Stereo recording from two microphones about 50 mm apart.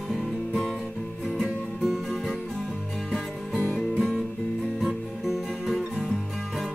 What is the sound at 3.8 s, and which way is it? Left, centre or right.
Music, centre.